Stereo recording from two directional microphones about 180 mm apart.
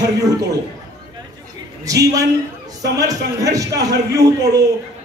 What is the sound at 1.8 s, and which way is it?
A man's voice, 20° right (ahead or behind).